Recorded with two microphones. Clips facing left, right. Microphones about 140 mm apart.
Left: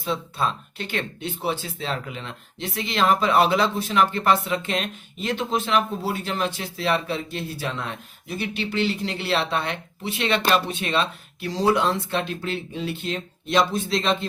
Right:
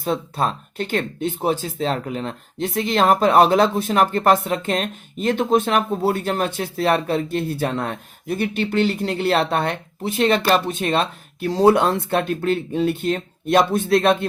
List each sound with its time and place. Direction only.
0.0 s speech: 45° right (ahead or behind)